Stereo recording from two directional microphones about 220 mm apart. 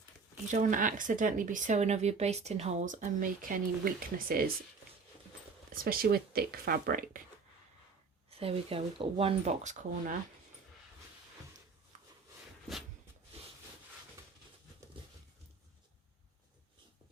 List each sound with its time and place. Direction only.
0.5 s speech: 35° right (ahead or behind)
5.7 s speech: 40° right (ahead or behind)
8.4 s speech: 25° right (ahead or behind)